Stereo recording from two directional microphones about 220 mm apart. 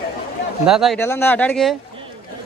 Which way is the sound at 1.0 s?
10° left (ahead or behind).